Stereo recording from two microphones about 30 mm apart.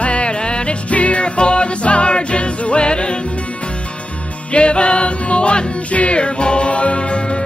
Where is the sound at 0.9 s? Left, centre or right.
Left.